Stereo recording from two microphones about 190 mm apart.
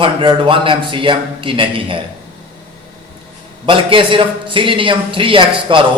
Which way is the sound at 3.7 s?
25° right (ahead or behind).